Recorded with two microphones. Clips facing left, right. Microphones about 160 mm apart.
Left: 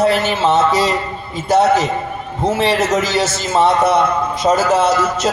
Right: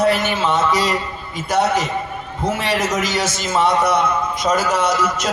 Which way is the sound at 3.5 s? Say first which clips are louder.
Left 3 dB; 25° left (ahead or behind).